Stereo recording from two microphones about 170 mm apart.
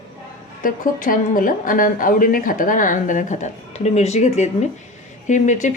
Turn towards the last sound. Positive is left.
turn(degrees=45)  # may be behind; listen again after turning